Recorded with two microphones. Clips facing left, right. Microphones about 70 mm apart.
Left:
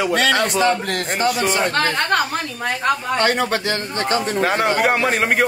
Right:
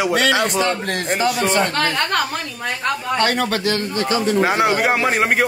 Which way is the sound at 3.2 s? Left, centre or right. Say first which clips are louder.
Even; left.